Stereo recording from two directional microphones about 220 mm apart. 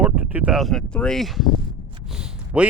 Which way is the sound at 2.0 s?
5° right (ahead or behind).